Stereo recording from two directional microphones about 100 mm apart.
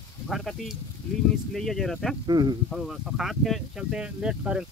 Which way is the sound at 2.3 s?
45° right (ahead or behind).